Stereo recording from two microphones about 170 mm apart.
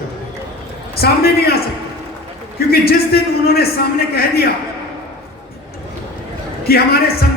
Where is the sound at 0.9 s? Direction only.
65° left (ahead or behind).